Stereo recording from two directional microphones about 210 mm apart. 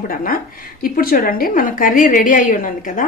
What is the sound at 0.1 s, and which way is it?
A woman's voice, 40° left (ahead or behind).